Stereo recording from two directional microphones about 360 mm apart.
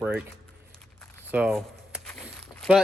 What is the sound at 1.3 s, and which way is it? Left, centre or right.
Walk, centre.